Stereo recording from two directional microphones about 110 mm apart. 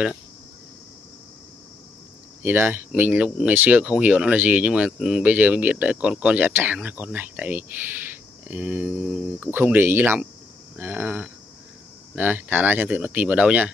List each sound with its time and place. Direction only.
2.4 s speech: 20° right (ahead or behind)